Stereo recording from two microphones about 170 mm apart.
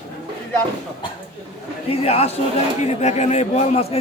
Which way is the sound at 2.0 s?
35° left (ahead or behind).